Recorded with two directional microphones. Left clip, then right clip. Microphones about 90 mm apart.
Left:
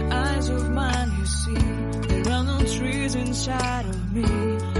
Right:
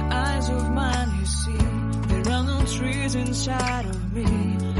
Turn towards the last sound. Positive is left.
turn(degrees=0)  # may be behind; listen again after turning